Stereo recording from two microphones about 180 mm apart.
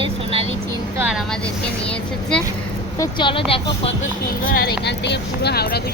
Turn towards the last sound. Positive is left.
turn(degrees=60)  # may be behind; listen again after turning